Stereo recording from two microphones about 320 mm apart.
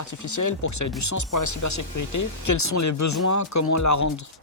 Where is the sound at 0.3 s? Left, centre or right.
Left.